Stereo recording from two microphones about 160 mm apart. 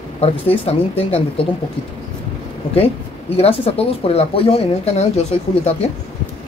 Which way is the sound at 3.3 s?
40° left (ahead or behind).